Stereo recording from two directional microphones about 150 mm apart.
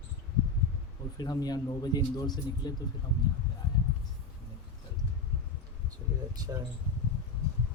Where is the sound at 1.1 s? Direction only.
25° left (ahead or behind).